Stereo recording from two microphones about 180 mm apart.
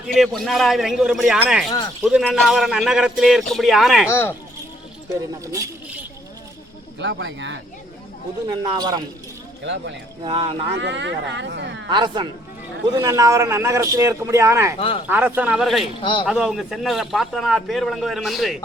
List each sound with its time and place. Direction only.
0.1 s a man's voice: centre (ahead or behind)
4.1 s speech: 15° left (ahead or behind)
5.4 s a man's voice: 15° right (ahead or behind)
7.0 s speech: 90° right
8.4 s speech: 25° right (ahead or behind)
10.2 s speech: 30° right (ahead or behind)
10.8 s speech: 80° right
11.9 s a man's voice: 25° right (ahead or behind)
14.8 s speech: 30° left (ahead or behind)
15.0 s a man's voice: 10° right (ahead or behind)
16.0 s a man's voice: 30° left (ahead or behind)
16.2 s a man's voice: 5° right (ahead or behind)